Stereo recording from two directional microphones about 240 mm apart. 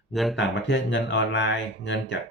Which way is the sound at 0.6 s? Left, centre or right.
Left.